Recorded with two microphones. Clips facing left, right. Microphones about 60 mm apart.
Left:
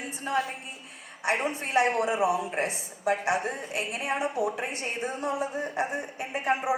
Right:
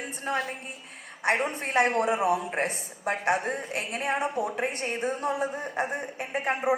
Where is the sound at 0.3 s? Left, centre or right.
Right.